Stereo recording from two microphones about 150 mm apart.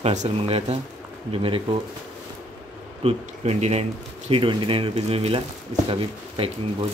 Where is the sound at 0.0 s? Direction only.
50° right (ahead or behind).